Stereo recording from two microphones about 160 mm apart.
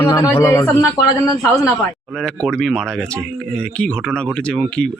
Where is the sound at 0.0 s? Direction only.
15° left (ahead or behind).